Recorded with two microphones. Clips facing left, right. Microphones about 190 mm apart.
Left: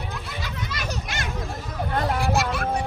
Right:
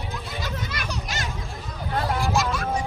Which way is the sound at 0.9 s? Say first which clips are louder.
Even; 55° left (ahead or behind).